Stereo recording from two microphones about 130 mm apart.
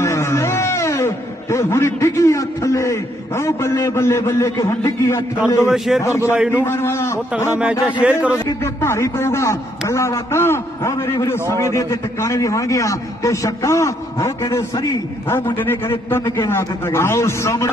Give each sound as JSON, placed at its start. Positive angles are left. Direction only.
{"t": 0.0, "sound": "a man's voice", "side_deg": 20}
{"t": 5.7, "sound": "a man's voice", "side_deg": 0}
{"t": 6.0, "sound": "a man's voice", "side_deg": 20}
{"t": 6.3, "sound": "a man's voice", "side_deg": -10}
{"t": 6.6, "sound": "a man's voice", "side_deg": 20}
{"t": 7.8, "sound": "a man's voice", "side_deg": -10}
{"t": 8.3, "sound": "a man's voice", "side_deg": 20}